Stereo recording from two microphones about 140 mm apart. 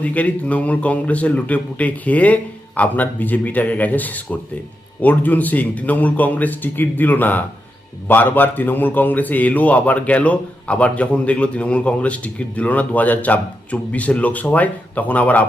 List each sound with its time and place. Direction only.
0.0 s a man's voice: 10° left (ahead or behind)